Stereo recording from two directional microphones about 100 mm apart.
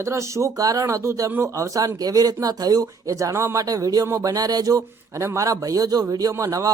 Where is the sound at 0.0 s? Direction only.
30° right (ahead or behind).